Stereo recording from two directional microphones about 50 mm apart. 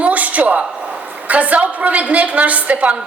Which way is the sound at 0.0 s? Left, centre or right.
Right.